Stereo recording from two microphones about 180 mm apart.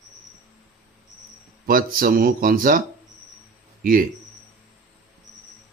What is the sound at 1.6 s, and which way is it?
Speech, 50° right (ahead or behind).